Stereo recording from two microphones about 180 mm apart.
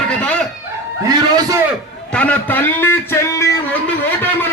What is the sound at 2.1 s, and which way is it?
A man's voice, 10° left (ahead or behind).